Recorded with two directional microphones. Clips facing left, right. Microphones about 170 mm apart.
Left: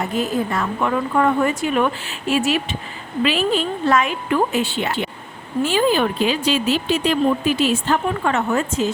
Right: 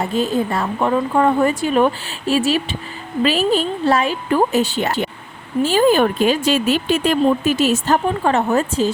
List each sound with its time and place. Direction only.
0.0 s speech: 30° right (ahead or behind)